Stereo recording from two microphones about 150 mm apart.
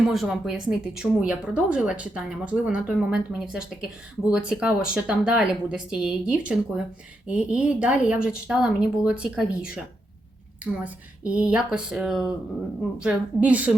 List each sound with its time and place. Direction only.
0.0 s a woman's voice: centre (ahead or behind)